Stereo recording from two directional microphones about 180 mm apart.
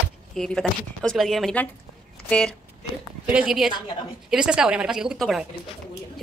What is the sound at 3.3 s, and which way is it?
Speech, 5° right (ahead or behind).